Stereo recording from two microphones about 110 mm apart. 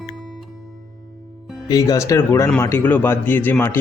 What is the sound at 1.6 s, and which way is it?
Speech, 35° left (ahead or behind).